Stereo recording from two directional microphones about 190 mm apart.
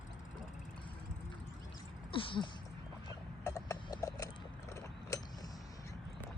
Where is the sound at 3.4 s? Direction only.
15° left (ahead or behind).